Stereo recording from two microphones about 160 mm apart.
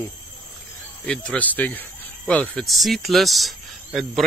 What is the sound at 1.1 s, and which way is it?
Speech, 5° left (ahead or behind).